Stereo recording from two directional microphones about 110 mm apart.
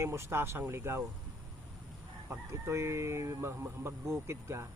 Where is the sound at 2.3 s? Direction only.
25° right (ahead or behind).